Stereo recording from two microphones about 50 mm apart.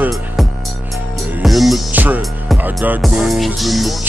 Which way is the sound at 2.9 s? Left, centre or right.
Centre.